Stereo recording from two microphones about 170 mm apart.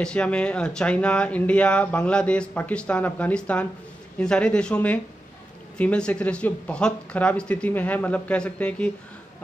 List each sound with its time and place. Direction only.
0.0 s speech: 5° left (ahead or behind)